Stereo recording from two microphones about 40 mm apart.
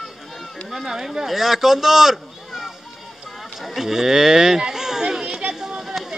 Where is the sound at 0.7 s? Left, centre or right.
Centre.